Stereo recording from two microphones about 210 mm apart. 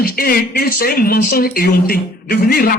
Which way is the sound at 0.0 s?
45° left (ahead or behind).